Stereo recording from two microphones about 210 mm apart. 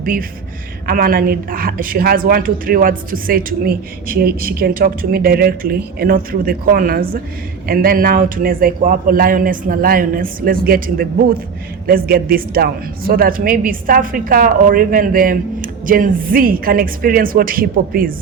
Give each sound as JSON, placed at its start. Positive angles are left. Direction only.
{"t": 0.0, "sound": "a woman's voice", "side_deg": -40}